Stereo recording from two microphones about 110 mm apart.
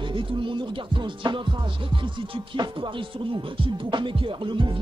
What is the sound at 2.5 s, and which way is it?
Music, 45° right (ahead or behind).